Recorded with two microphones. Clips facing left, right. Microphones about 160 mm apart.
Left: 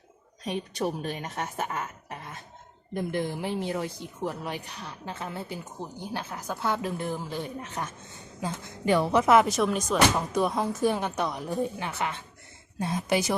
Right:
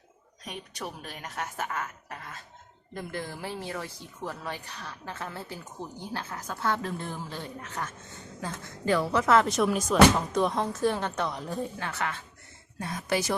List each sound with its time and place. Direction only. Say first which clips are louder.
0.4 s a woman's voice: left 9 dB; 30° left (ahead or behind)
9.5 s a woman's voice: even; centre (ahead or behind); by 13.3 s 15° left (ahead or behind)